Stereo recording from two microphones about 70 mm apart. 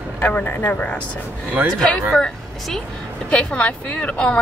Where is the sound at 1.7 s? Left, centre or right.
Centre.